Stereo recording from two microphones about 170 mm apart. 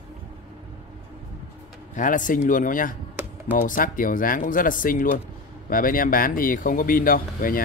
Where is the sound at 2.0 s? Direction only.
50° left (ahead or behind).